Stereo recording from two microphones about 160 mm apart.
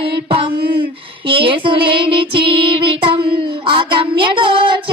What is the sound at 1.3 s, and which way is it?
Female singing, 35° right (ahead or behind).